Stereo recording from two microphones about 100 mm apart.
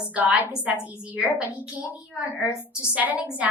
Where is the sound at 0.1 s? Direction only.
15° right (ahead or behind).